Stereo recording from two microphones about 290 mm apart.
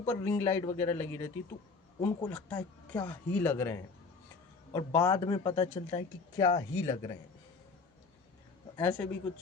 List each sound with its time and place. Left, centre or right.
0.0 s speech: centre
8.7 s speech: centre